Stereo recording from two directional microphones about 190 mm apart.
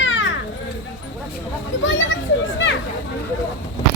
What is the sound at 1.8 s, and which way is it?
Children playing, 80° left.